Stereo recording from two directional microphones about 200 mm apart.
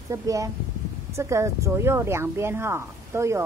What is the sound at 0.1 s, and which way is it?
Speech, 15° right (ahead or behind).